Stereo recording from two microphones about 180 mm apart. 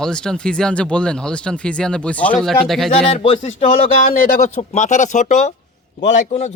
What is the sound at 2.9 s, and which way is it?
A man's voice, 30° left (ahead or behind).